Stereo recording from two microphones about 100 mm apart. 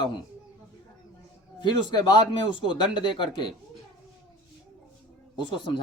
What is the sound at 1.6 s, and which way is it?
A man's voice, 50° left (ahead or behind).